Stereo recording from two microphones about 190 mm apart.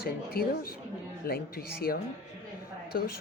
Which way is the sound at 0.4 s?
50° left (ahead or behind).